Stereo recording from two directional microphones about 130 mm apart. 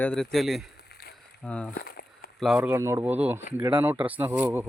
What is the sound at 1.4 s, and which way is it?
Speech, 10° left (ahead or behind).